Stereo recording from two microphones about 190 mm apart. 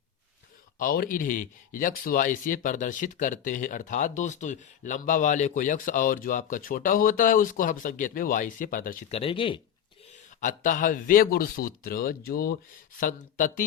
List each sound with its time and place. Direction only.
0.8 s speech: 45° left (ahead or behind)
9.1 s speech: 30° left (ahead or behind)
10.4 s speech: 45° left (ahead or behind)